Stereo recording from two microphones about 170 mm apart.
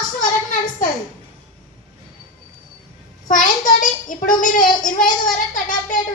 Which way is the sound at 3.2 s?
50° left (ahead or behind).